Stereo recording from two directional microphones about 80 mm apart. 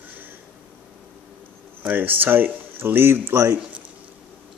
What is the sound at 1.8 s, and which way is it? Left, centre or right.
Speech, right.